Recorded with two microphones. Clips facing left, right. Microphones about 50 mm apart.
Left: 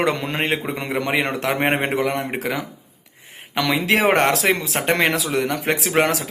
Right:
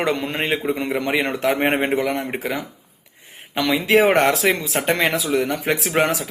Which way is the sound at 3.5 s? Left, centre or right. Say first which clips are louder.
Right 1 dB; left.